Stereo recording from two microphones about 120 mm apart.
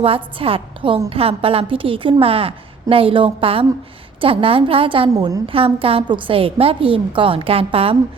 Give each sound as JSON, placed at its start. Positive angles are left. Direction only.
{"t": 0.0, "sound": "a woman's voice", "side_deg": -50}